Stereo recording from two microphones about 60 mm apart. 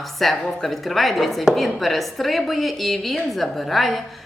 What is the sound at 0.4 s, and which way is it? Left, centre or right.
A woman's voice, centre.